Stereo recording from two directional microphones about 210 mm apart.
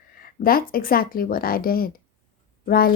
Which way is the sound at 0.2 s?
45° left (ahead or behind).